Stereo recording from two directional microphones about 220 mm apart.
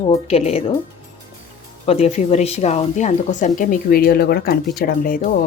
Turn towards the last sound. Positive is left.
turn(degrees=40)  # may be behind; listen again after turning